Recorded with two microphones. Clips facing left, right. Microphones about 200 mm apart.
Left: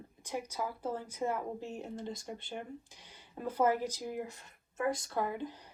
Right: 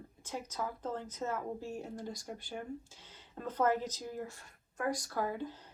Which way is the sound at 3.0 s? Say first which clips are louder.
Left 3 dB; 10° left (ahead or behind).